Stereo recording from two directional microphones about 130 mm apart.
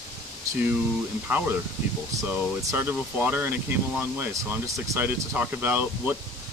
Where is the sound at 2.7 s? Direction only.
15° right (ahead or behind).